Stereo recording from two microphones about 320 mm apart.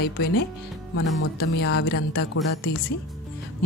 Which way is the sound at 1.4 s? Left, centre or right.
Left.